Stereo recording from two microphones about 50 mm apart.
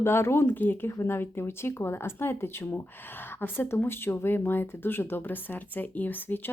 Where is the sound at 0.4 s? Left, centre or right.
Left.